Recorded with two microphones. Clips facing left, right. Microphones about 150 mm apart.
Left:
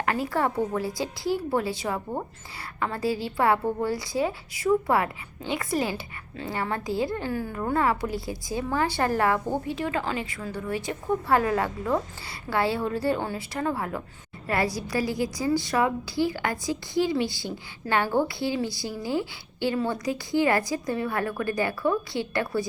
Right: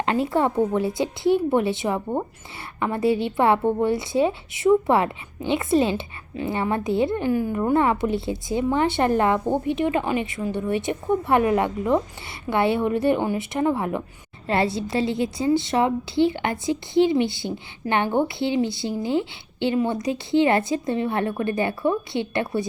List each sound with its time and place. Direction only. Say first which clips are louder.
0.0 s a woman's voice: right 4 dB; 25° right (ahead or behind)